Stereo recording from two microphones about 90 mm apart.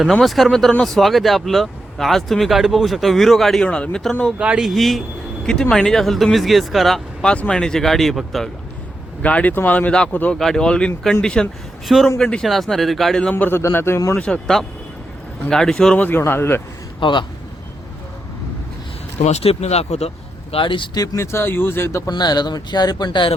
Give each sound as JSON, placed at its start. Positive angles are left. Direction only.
{"t": 0.0, "sound": "speech", "side_deg": 0}
{"t": 4.4, "sound": "speech", "side_deg": -10}
{"t": 9.2, "sound": "speech", "side_deg": 15}
{"t": 10.3, "sound": "speech", "side_deg": 5}
{"t": 13.3, "sound": "speech", "side_deg": 25}
{"t": 14.2, "sound": "speech", "side_deg": 10}
{"t": 16.0, "sound": "speech", "side_deg": 25}
{"t": 17.0, "sound": "a man's voice", "side_deg": 60}
{"t": 19.5, "sound": "speech", "side_deg": 90}
{"t": 20.5, "sound": "speech", "side_deg": 75}
{"t": 20.9, "sound": "speech", "side_deg": 45}
{"t": 21.2, "sound": "speech", "side_deg": 25}
{"t": 22.1, "sound": "speech", "side_deg": 50}